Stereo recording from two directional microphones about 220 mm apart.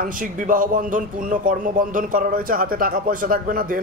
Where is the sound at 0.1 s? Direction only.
40° right (ahead or behind).